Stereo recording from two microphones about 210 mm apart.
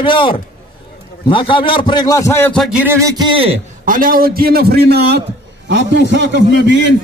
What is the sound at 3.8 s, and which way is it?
A man's voice, 40° right (ahead or behind).